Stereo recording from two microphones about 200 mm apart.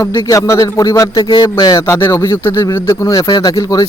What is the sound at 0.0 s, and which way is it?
Speech, 15° left (ahead or behind).